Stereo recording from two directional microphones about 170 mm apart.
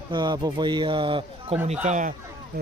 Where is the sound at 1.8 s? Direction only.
45° right (ahead or behind).